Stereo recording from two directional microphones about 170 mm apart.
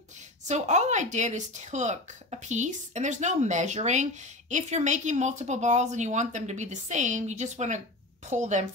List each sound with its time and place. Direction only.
0.5 s speech: 40° right (ahead or behind)